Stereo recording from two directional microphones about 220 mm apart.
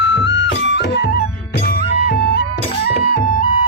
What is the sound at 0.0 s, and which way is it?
Music, 50° left (ahead or behind).